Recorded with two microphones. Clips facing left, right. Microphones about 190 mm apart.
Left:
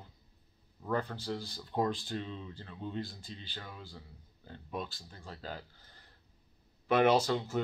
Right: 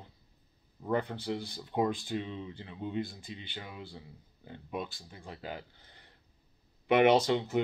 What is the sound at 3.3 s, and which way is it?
Speech, 15° right (ahead or behind).